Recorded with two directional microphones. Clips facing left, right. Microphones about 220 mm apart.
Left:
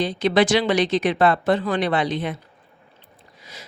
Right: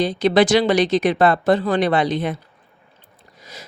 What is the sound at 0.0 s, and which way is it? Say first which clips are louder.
Speech: right 3 dB; 40° right (ahead or behind).